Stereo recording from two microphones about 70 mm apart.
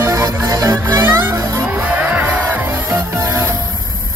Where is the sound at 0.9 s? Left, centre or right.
Right.